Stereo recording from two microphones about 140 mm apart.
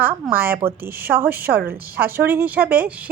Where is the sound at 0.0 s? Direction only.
15° right (ahead or behind).